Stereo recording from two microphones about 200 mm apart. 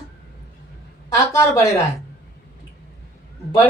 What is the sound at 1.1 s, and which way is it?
Speech, 15° left (ahead or behind).